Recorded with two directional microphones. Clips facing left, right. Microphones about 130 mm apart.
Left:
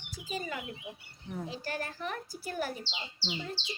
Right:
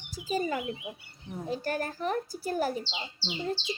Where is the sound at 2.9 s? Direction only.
25° right (ahead or behind).